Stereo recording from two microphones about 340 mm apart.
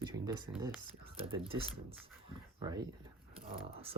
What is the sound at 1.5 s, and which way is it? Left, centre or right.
Speech, centre.